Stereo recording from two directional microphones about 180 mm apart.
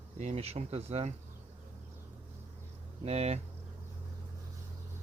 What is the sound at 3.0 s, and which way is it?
Speech, 35° right (ahead or behind).